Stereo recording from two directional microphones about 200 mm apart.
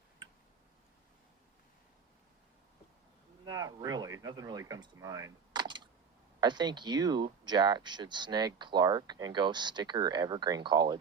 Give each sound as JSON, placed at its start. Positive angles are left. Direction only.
{"t": 3.4, "sound": "speech", "side_deg": -20}